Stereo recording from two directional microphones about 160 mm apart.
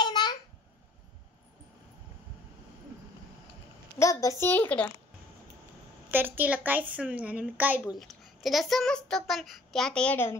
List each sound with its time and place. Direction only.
0.0 s babbling: 25° left (ahead or behind)
4.0 s a child's voice: 20° left (ahead or behind)
6.0 s a woman's voice: 10° right (ahead or behind)
8.0 s a child's voice: centre (ahead or behind)